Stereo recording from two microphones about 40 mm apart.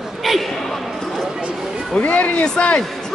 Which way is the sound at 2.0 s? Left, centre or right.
Left.